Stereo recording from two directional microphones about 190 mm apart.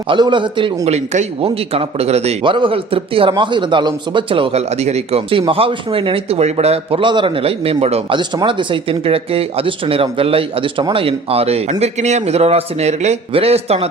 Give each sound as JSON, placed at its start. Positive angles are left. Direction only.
{"t": 0.1, "sound": "a man's voice", "side_deg": -25}